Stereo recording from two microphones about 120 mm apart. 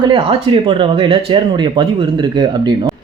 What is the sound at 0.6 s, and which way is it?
Speech, 50° right (ahead or behind).